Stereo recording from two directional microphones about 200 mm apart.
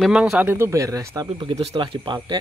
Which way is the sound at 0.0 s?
5° right (ahead or behind).